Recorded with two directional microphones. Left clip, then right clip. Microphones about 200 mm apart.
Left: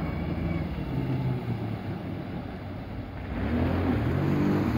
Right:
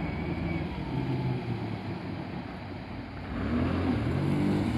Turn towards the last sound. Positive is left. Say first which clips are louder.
# left 3 dB
turn(degrees=-40)  # may be behind; listen again after turning